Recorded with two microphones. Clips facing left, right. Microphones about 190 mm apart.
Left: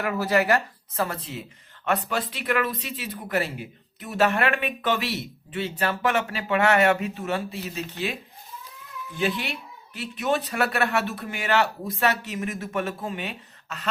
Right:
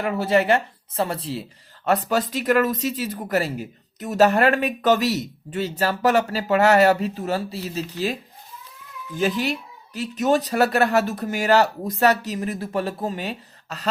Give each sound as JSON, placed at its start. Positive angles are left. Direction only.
{"t": 0.0, "sound": "speech", "side_deg": -25}
{"t": 9.1, "sound": "speech", "side_deg": -40}